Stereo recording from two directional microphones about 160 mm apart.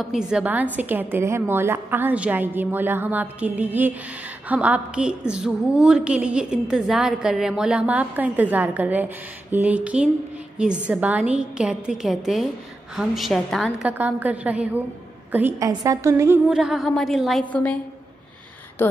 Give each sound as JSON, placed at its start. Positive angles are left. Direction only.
{"t": 0.0, "sound": "a woman's voice", "side_deg": -5}
{"t": 15.6, "sound": "a woman's voice", "side_deg": -25}
{"t": 16.4, "sound": "a woman's voice", "side_deg": -5}
{"t": 18.8, "sound": "speech", "side_deg": 15}